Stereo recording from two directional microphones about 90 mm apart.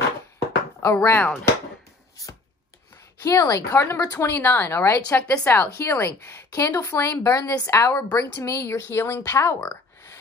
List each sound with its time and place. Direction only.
0.8 s speech: 25° left (ahead or behind)
3.2 s speech: 40° left (ahead or behind)
4.3 s speech: 20° left (ahead or behind)
5.1 s speech: 15° left (ahead or behind)